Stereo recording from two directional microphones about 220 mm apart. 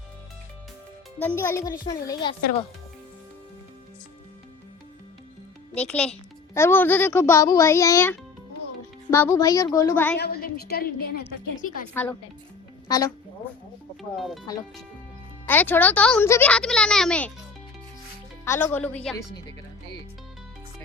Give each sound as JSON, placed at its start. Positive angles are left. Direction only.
{"t": 1.2, "sound": "a child's voice", "side_deg": 10}
{"t": 5.7, "sound": "a child's voice", "side_deg": 5}
{"t": 10.2, "sound": "a woman's voice", "side_deg": 45}
{"t": 12.0, "sound": "a child's voice", "side_deg": 10}
{"t": 15.4, "sound": "speech", "side_deg": 10}
{"t": 18.4, "sound": "a child's voice", "side_deg": 10}